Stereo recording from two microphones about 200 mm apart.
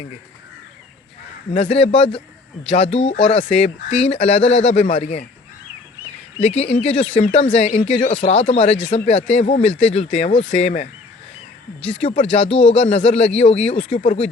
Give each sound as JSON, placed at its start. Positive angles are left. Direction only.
{"t": 1.5, "sound": "speech", "side_deg": 30}
{"t": 6.4, "sound": "speech", "side_deg": 30}
{"t": 12.1, "sound": "speech", "side_deg": 30}
{"t": 12.5, "sound": "speech", "side_deg": 5}
{"t": 12.8, "sound": "speech", "side_deg": 30}